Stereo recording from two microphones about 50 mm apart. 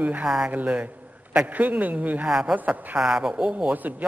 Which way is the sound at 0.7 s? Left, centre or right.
Right.